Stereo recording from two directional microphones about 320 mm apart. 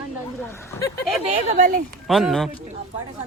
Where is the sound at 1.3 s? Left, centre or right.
Right.